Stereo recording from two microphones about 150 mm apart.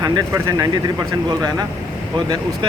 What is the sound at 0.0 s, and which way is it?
Speech, 25° right (ahead or behind).